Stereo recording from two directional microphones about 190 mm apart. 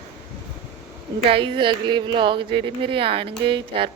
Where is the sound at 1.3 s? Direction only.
25° right (ahead or behind).